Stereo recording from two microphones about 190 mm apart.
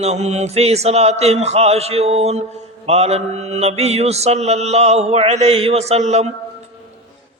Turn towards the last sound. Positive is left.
turn(degrees=-35)  # may be behind; listen again after turning